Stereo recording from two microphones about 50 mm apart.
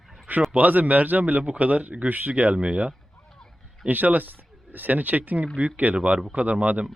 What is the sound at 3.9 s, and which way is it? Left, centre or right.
A man's voice, right.